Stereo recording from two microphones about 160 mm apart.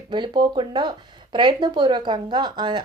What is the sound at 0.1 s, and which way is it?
Speech, 30° right (ahead or behind).